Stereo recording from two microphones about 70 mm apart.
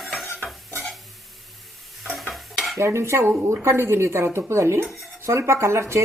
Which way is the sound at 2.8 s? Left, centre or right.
Right.